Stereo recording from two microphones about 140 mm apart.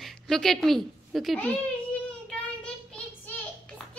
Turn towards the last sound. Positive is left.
turn(degrees=10)  # may be behind; listen again after turning